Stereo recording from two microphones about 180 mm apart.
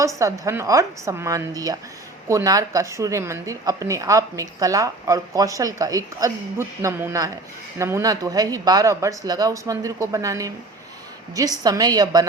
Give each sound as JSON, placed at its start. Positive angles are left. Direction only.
{"t": 0.0, "sound": "a woman's voice", "side_deg": -15}